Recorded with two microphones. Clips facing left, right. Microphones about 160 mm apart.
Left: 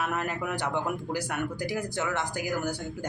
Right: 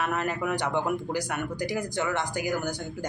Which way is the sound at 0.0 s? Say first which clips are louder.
Right 2 dB; 5° left (ahead or behind).